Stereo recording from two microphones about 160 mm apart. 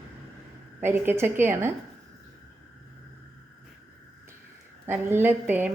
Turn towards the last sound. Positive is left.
turn(degrees=-10)  # may be behind; listen again after turning